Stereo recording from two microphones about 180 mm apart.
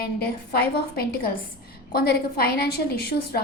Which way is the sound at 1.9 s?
60° left (ahead or behind).